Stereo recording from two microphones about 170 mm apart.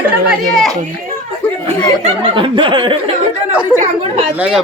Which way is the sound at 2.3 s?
30° right (ahead or behind).